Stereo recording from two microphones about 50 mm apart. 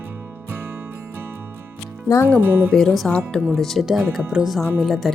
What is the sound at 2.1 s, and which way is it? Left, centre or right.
Speech, centre.